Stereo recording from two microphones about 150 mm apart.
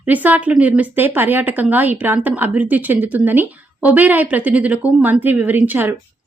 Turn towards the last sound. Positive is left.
turn(degrees=-15)  # may be behind; listen again after turning